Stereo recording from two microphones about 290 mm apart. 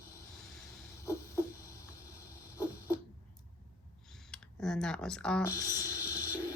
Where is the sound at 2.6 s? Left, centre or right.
Centre.